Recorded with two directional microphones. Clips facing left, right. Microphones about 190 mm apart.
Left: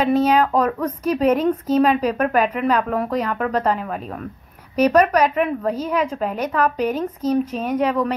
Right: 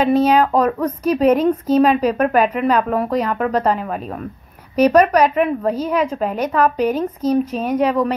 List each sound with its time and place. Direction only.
0.0 s a woman's voice: 35° right (ahead or behind)